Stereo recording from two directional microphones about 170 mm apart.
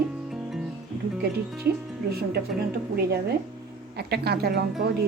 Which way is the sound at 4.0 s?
70° right (ahead or behind).